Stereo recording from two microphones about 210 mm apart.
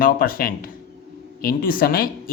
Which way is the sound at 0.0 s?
45° left (ahead or behind).